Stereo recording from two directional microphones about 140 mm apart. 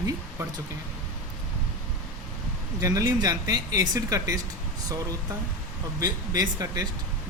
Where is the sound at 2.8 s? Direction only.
25° right (ahead or behind).